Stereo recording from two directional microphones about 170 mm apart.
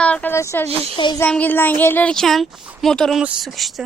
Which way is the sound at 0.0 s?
10° left (ahead or behind).